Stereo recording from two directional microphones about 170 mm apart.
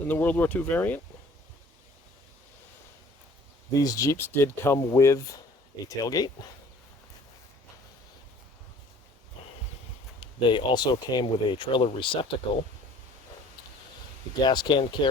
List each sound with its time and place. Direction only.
0.1 s speech: 10° left (ahead or behind)
3.8 s speech: 20° left (ahead or behind)
10.2 s speech: 30° left (ahead or behind)
14.4 s speech: 25° left (ahead or behind)